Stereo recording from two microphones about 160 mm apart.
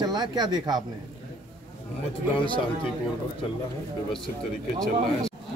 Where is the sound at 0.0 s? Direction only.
25° right (ahead or behind).